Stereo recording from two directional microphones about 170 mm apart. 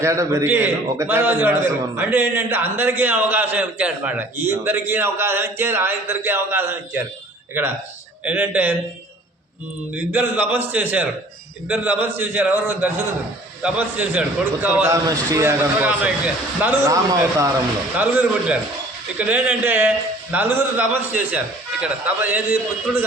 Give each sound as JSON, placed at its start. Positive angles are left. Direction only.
{"t": 0.0, "sound": "a man's voice", "side_deg": -15}
{"t": 8.2, "sound": "a man's voice", "side_deg": -10}
{"t": 9.9, "sound": "a man's voice", "side_deg": -10}